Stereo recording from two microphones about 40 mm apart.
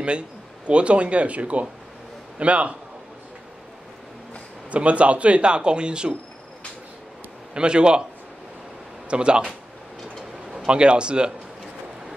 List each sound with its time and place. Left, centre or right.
0.7 s a man's voice: right
4.6 s speech: right
7.5 s speech: right
9.1 s speech: right
10.7 s speech: right